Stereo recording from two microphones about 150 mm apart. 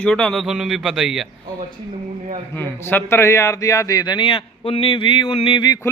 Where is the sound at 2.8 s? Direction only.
15° left (ahead or behind); by 5.8 s 30° left (ahead or behind).